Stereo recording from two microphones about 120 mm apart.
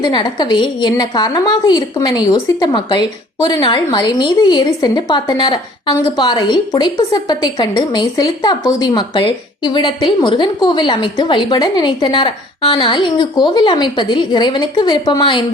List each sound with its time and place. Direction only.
0.0 s a woman's voice: 35° left (ahead or behind)